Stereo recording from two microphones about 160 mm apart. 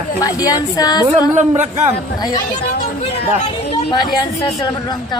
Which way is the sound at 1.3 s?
45° right (ahead or behind).